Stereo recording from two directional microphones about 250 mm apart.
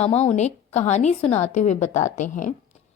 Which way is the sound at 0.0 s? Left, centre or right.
Left.